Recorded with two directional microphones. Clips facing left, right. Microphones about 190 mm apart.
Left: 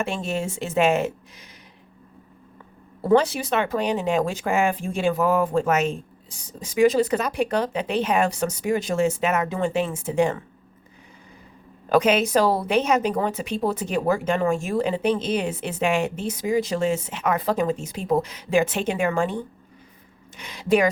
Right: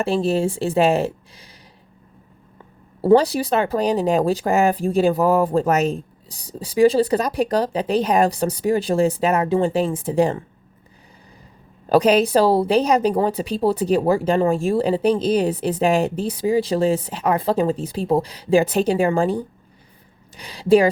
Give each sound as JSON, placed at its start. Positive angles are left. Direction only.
{"t": 0.0, "sound": "a woman's voice", "side_deg": -35}
{"t": 3.0, "sound": "a woman's voice", "side_deg": -35}
{"t": 11.9, "sound": "a woman's voice", "side_deg": -35}